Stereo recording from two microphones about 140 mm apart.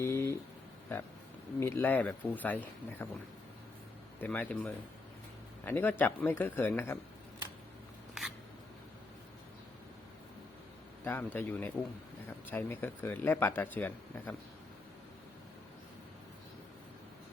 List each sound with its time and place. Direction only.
0.0 s a sound: 20° left (ahead or behind)
1.5 s speech: 15° left (ahead or behind)
4.2 s speech: 10° left (ahead or behind)
11.0 s speech: 15° left (ahead or behind)